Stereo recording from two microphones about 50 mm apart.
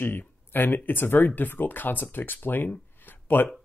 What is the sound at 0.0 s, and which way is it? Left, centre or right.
Speech, left.